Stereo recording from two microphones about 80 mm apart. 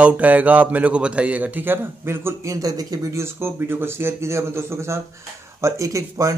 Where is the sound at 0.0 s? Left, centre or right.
Centre; by 3.1 s right.